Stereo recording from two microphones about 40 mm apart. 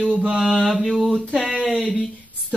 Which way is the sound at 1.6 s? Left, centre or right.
Centre.